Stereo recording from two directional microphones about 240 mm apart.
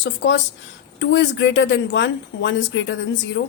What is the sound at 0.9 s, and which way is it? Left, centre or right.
A woman's voice, left.